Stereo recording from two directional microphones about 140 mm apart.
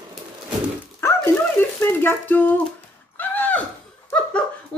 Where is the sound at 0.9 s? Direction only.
15° left (ahead or behind).